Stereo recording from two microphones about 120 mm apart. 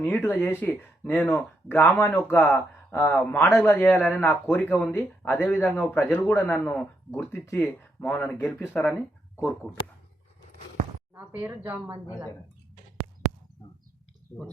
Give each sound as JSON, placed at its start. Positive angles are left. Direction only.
{"t": 0.0, "sound": "speech", "side_deg": 15}
{"t": 7.2, "sound": "speech", "side_deg": 25}
{"t": 11.1, "sound": "speech", "side_deg": -20}